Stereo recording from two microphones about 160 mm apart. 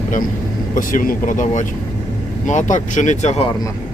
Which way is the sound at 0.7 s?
60° left (ahead or behind).